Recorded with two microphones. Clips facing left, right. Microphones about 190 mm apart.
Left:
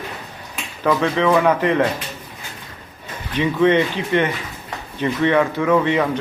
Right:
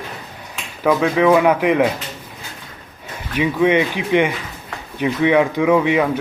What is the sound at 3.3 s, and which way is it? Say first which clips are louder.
Speech: even; 10° right (ahead or behind).